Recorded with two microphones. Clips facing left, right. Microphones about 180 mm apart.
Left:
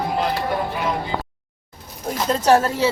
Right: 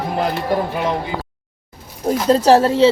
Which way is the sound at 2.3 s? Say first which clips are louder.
Right 4 dB; 30° right (ahead or behind).